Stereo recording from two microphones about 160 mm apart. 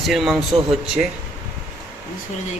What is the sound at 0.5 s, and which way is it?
Speech, 35° right (ahead or behind).